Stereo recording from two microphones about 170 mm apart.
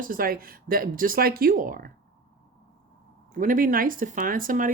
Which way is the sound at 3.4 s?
55° right (ahead or behind).